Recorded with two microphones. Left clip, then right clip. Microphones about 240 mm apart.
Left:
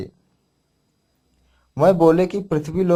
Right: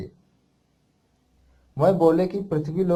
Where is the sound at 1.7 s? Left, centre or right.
Left.